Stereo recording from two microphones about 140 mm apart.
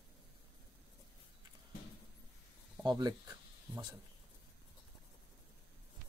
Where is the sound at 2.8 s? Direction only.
30° right (ahead or behind).